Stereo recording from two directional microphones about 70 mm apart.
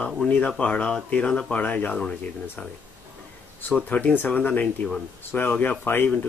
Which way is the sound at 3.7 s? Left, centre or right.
Centre.